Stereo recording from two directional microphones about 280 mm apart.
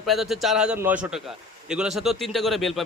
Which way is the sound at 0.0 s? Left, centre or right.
Centre.